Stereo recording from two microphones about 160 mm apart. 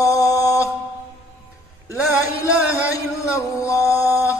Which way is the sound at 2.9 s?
20° left (ahead or behind).